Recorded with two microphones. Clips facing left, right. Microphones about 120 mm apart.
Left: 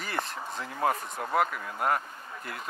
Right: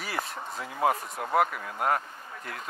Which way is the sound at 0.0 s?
5° right (ahead or behind).